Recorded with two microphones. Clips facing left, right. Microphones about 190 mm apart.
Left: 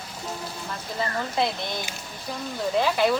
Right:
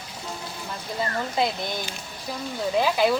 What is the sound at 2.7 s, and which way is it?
Speech, 5° right (ahead or behind).